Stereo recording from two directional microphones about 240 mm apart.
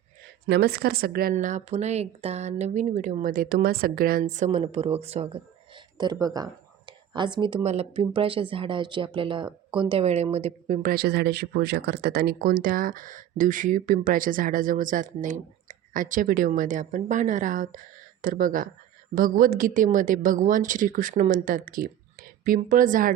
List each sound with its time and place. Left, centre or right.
0.4 s a woman's voice: right